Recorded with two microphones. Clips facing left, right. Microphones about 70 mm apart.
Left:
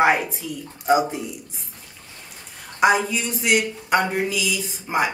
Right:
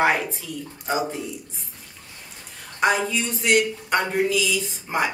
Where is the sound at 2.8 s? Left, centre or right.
Centre.